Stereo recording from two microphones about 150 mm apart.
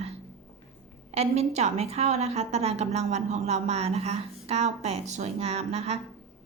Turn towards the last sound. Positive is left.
turn(degrees=-45)  # may be behind; listen again after turning